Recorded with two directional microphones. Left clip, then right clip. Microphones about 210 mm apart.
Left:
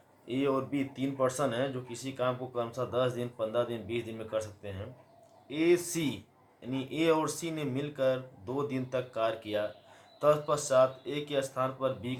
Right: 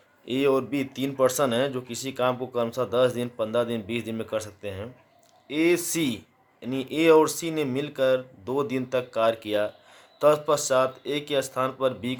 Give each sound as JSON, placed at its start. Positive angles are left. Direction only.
{"t": 0.3, "sound": "speech", "side_deg": -55}